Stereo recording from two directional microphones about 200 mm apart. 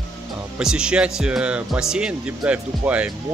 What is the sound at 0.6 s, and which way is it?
Speech, 5° right (ahead or behind).